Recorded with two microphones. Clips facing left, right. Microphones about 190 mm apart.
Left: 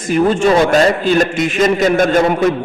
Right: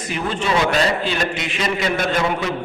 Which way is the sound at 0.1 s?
45° left (ahead or behind).